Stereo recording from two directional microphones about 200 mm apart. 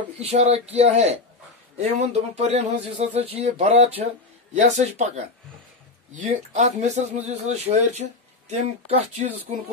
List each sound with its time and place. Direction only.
0.2 s speech: 30° right (ahead or behind)
6.1 s speech: 35° right (ahead or behind)